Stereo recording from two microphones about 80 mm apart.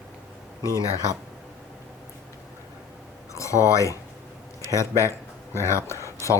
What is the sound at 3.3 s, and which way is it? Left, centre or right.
Speech, left.